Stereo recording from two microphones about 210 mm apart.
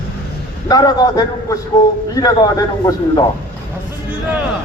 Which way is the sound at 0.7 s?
20° left (ahead or behind).